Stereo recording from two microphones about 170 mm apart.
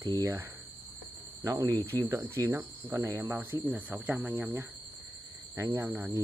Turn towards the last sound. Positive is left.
turn(degrees=-10)  # may be behind; listen again after turning